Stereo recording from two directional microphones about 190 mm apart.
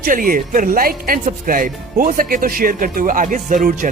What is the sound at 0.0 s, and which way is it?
Speech, 45° right (ahead or behind).